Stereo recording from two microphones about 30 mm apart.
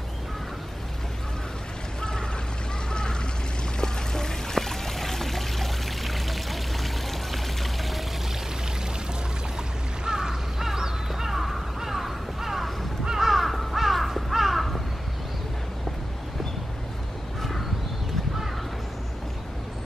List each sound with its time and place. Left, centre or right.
2.0 s a sound: left
2.9 s boat: left
3.8 s pour: centre
10.0 s crow: centre
13.3 s crow: centre
17.4 s crow: centre